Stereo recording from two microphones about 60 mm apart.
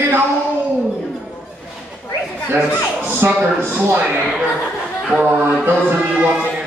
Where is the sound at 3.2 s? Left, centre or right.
Right.